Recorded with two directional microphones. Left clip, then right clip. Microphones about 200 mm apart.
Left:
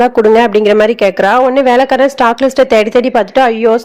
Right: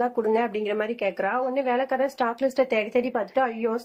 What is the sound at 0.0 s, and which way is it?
Speech, 50° left (ahead or behind).